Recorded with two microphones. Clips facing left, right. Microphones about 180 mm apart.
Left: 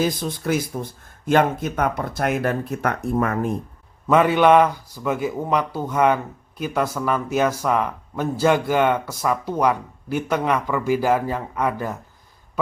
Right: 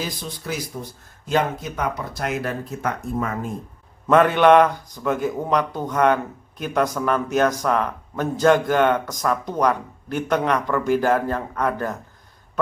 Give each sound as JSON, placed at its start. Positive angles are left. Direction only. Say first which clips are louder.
{"t": 0.0, "sound": "speech", "louder": "left 8 dB", "side_deg": 50}
{"t": 4.0, "sound": "speech", "louder": "right 1 dB", "side_deg": 5}